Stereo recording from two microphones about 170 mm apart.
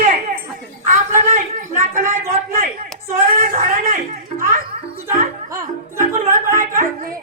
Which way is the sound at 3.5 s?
40° right (ahead or behind).